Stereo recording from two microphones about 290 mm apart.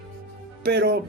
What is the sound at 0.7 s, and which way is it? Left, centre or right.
Speech, right.